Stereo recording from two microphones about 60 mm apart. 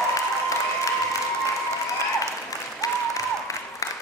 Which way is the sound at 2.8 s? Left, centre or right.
Left.